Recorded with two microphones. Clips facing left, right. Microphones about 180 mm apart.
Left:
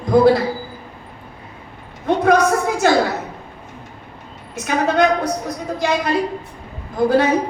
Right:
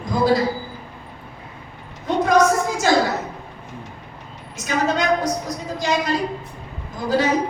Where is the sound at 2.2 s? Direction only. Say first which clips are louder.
Left 1 dB; 60° left (ahead or behind).